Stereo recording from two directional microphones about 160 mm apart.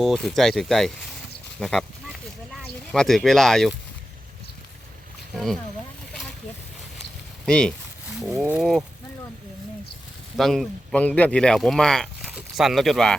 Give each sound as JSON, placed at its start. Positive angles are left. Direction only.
{"t": 0.0, "sound": "speech", "side_deg": 5}
{"t": 5.3, "sound": "speech", "side_deg": 0}
{"t": 7.4, "sound": "speech", "side_deg": 5}
{"t": 10.3, "sound": "speech", "side_deg": 0}